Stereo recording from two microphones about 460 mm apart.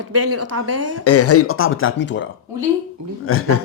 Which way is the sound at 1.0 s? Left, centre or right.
Left.